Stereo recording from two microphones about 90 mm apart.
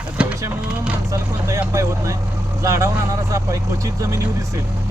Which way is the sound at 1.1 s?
35° right (ahead or behind).